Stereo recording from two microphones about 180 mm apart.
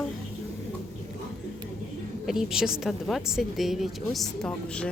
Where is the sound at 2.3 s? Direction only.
5° right (ahead or behind).